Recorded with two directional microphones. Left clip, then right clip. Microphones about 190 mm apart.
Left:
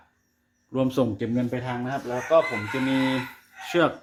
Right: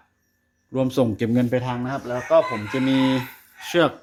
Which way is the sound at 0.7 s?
20° right (ahead or behind).